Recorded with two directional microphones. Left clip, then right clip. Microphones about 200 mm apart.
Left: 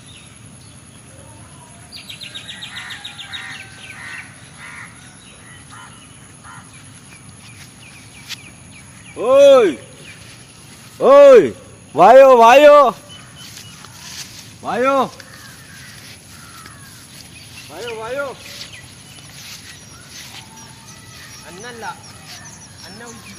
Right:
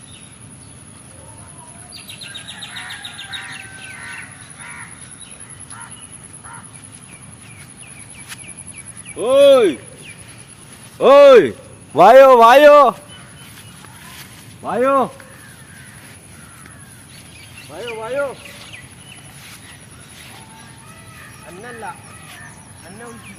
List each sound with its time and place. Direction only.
2.0 s bird: 40° right (ahead or behind)
9.1 s speech: 25° left (ahead or behind)
10.9 s speech: 5° left (ahead or behind)
11.9 s speech: 20° right (ahead or behind); by 13.0 s 40° right (ahead or behind)
14.6 s speech: 30° right (ahead or behind)
17.7 s a sound: 30° right (ahead or behind)
21.6 s a sound: 30° right (ahead or behind)